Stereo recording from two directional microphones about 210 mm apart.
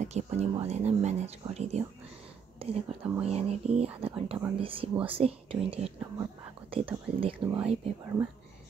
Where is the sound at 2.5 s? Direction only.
30° right (ahead or behind).